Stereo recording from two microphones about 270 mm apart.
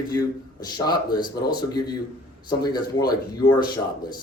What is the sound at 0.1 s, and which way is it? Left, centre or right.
Speech, centre.